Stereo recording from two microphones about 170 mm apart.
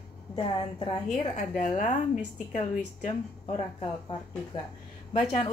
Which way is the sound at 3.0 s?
35° left (ahead or behind).